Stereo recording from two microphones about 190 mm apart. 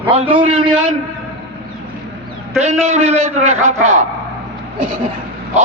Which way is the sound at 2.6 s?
35° right (ahead or behind).